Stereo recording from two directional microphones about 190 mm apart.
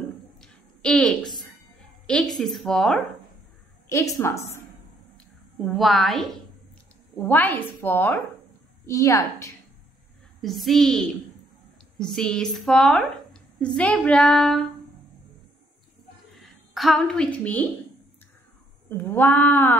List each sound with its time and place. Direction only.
0.4 s a sound: 5° left (ahead or behind)
2.3 s speech: centre (ahead or behind)
3.9 s a woman's voice: 15° left (ahead or behind)
5.7 s a woman's voice: centre (ahead or behind); by 9.5 s 15° left (ahead or behind)
10.4 s a woman's voice: centre (ahead or behind)
16.3 s a woman's voice: centre (ahead or behind)
18.9 s a woman's voice: 10° left (ahead or behind)